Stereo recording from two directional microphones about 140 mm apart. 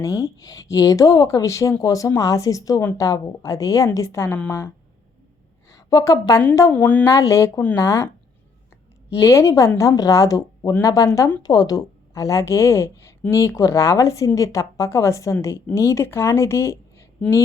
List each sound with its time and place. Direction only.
0.0 s a woman's voice: 25° left (ahead or behind)
6.7 s speech: 10° left (ahead or behind)
7.1 s a woman's voice: 25° left (ahead or behind)
9.1 s a woman's voice: 20° left (ahead or behind)